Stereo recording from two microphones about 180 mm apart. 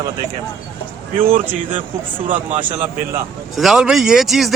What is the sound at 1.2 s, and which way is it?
Speech, 50° right (ahead or behind).